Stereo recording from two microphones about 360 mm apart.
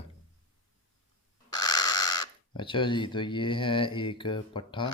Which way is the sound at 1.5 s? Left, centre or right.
Centre.